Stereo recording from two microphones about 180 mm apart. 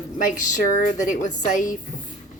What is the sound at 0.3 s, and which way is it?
A woman's voice, 45° left (ahead or behind).